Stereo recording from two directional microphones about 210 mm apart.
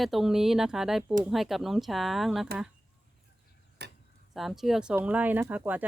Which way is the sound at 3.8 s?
55° right (ahead or behind).